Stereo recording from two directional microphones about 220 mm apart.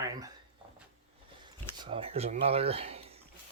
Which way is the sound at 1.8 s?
25° right (ahead or behind).